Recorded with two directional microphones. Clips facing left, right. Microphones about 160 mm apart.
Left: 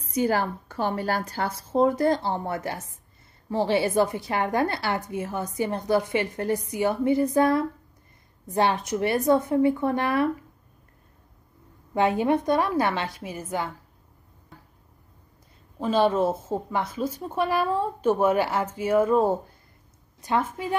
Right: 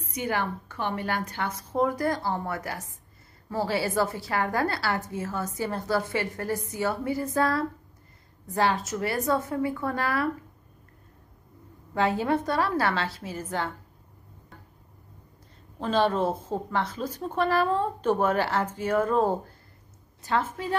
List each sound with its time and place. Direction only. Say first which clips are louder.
0.0 s a woman's voice: left 5 dB; 35° left (ahead or behind)
11.9 s speech: left 3 dB; 20° left (ahead or behind)
15.8 s speech: left 3 dB; 10° left (ahead or behind)